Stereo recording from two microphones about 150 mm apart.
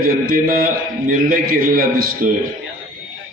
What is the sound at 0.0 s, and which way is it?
A man's voice, 70° right (ahead or behind).